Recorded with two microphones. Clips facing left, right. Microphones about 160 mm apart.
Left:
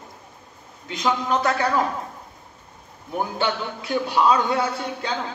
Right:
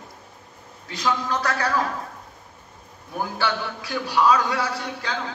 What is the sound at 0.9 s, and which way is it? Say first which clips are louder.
Speech: left 2 dB; 20° left (ahead or behind).